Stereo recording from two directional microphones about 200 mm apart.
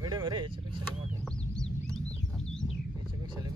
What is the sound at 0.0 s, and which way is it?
Vehicle, 20° right (ahead or behind).